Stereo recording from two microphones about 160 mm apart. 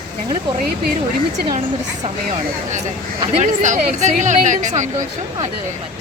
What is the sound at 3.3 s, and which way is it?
Speech, 50° right (ahead or behind).